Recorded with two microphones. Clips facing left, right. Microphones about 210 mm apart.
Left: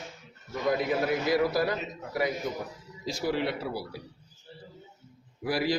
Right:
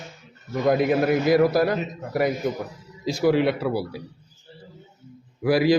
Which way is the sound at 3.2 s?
80° right.